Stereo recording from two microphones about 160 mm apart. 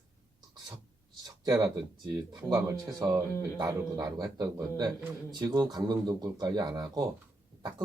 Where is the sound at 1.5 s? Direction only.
20° right (ahead or behind).